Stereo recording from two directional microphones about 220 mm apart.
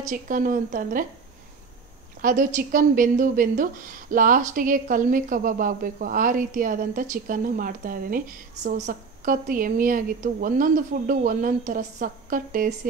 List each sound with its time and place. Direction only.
0.1 s a woman's voice: 40° right (ahead or behind)
2.2 s a woman's voice: 35° right (ahead or behind)